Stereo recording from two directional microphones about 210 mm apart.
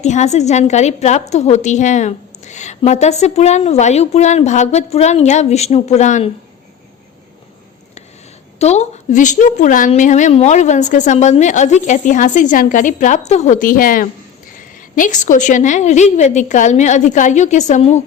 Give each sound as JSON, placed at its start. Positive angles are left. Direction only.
{"t": 0.0, "sound": "a woman's voice", "side_deg": 35}
{"t": 8.5, "sound": "a woman's voice", "side_deg": 30}